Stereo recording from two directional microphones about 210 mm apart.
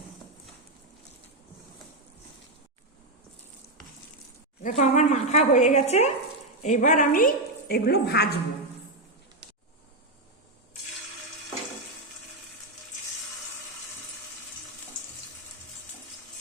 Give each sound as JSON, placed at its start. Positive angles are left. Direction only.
{"t": 4.6, "sound": "a woman's voice", "side_deg": 35}